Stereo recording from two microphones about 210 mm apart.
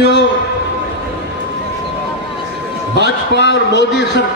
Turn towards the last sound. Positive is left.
turn(degrees=55)  # may be behind; listen again after turning